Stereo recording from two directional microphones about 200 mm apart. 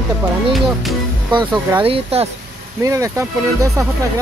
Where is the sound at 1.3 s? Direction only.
20° right (ahead or behind).